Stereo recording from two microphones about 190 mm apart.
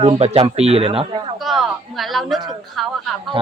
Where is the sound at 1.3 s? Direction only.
Centre (ahead or behind).